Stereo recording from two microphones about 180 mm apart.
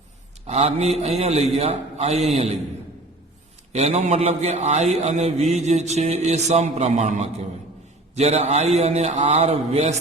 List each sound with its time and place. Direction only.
0.4 s a man's voice: 35° right (ahead or behind)
3.7 s a man's voice: 35° right (ahead or behind)